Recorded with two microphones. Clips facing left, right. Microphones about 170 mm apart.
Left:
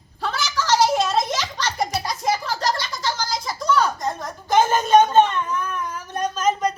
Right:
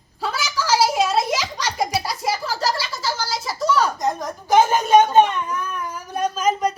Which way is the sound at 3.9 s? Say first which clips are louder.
Right 4 dB; 15° right (ahead or behind).